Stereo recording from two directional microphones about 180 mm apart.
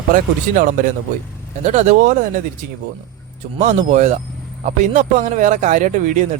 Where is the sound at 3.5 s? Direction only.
40° right (ahead or behind).